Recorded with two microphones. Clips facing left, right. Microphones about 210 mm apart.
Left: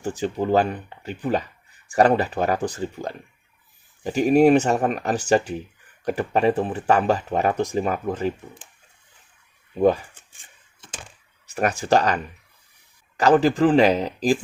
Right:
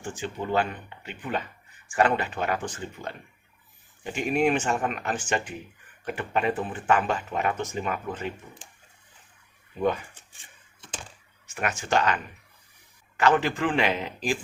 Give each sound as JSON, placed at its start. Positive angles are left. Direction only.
{"t": 0.0, "sound": "speech", "side_deg": 40}
{"t": 9.7, "sound": "speech", "side_deg": 35}
{"t": 11.4, "sound": "speech", "side_deg": 35}